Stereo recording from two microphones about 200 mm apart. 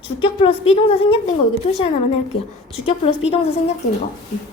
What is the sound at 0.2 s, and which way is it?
A woman's voice, 25° left (ahead or behind).